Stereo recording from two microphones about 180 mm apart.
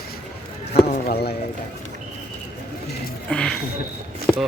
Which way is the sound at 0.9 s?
60° left (ahead or behind).